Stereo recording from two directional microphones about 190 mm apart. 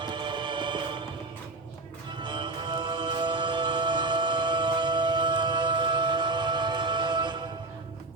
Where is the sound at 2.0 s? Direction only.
25° right (ahead or behind).